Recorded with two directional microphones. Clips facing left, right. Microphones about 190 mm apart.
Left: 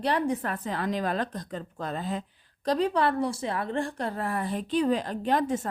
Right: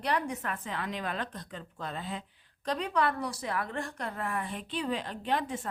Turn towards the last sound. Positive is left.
turn(degrees=40)  # may be behind; listen again after turning